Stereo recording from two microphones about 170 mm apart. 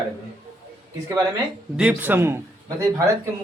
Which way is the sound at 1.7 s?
5° right (ahead or behind).